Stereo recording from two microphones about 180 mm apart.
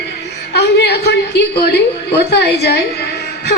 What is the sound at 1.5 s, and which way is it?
Speech, 65° left (ahead or behind).